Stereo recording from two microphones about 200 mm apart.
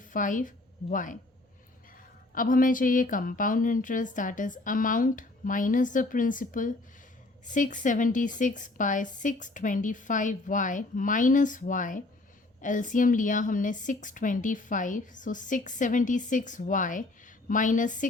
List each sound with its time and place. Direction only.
0.1 s a woman's voice: 40° left (ahead or behind)
2.3 s a woman's voice: 45° left (ahead or behind)